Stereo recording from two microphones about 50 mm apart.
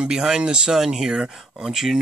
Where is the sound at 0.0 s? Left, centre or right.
Centre.